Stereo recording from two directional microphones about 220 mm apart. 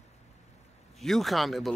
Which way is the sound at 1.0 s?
Centre (ahead or behind).